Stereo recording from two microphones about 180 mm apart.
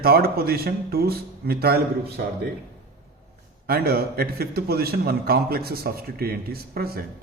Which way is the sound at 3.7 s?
60° right (ahead or behind).